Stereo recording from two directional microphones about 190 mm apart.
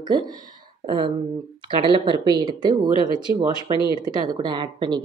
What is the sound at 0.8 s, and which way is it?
Speech, 25° right (ahead or behind).